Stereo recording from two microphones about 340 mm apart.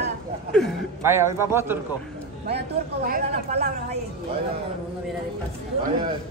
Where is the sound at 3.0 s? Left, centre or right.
Right.